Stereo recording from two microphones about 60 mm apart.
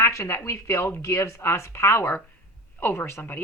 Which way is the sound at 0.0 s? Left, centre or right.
Left.